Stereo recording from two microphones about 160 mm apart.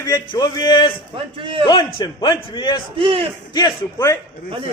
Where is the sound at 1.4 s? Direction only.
35° right (ahead or behind).